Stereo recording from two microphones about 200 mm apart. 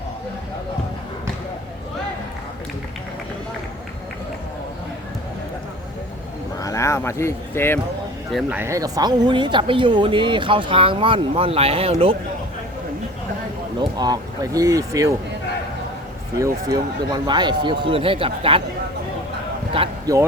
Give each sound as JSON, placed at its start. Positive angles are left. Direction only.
{"t": 6.6, "sound": "a sound", "side_deg": 15}
{"t": 8.3, "sound": "speech", "side_deg": -5}
{"t": 14.0, "sound": "speech", "side_deg": -20}
{"t": 16.4, "sound": "speech", "side_deg": -20}
{"t": 19.7, "sound": "speech", "side_deg": -30}